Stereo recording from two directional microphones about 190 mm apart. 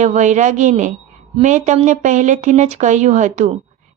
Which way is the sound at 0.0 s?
40° right (ahead or behind).